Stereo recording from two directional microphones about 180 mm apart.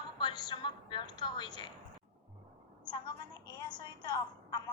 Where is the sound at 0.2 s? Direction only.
25° left (ahead or behind).